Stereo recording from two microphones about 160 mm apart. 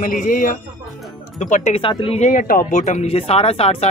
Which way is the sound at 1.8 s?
30° left (ahead or behind).